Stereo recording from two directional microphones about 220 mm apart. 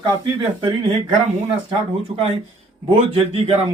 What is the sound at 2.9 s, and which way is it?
Speech, 25° right (ahead or behind).